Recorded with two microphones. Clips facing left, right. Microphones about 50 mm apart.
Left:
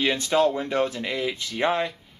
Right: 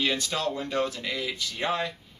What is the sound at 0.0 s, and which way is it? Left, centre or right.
Speech, left.